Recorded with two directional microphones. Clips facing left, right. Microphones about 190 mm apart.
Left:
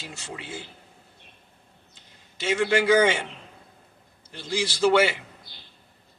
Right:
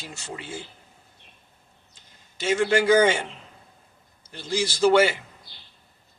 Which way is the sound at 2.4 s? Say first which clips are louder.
Right 1 dB; 45° right (ahead or behind).